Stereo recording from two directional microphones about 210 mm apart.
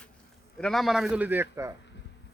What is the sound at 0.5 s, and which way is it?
Speech, centre (ahead or behind).